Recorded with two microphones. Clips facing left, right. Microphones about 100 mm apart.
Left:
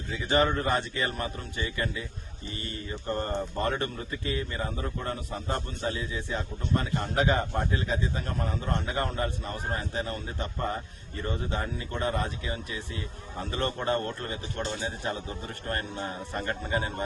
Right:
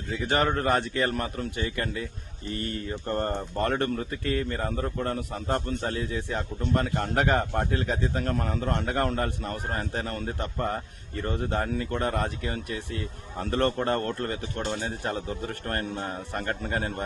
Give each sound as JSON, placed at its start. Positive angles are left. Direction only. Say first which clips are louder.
{"t": 0.2, "sound": "speech", "louder": "even", "side_deg": -55}